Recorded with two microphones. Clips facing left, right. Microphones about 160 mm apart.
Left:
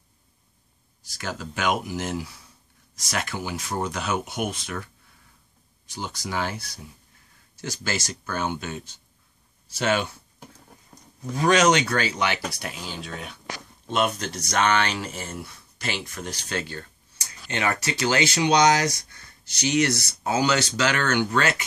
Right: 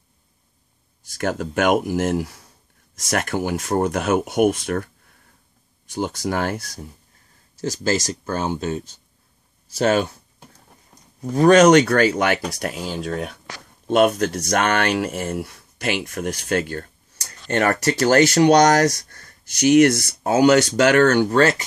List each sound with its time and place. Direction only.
1.1 s speech: 50° right (ahead or behind)
7.6 s speech: 40° right (ahead or behind)
11.3 s speech: 50° right (ahead or behind)
16.7 s computer keyboard: 45° right (ahead or behind)
17.5 s speech: 50° right (ahead or behind); by 21.6 s 35° right (ahead or behind)